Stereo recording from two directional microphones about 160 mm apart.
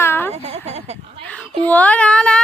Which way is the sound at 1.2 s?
5° left (ahead or behind).